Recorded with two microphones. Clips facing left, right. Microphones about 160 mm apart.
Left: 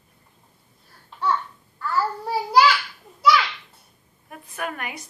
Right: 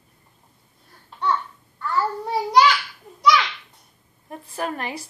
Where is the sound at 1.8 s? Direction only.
5° left (ahead or behind).